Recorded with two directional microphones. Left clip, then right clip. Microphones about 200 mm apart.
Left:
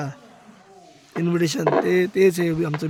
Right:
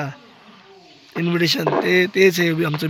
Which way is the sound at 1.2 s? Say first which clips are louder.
Right 3 dB; 10° left (ahead or behind).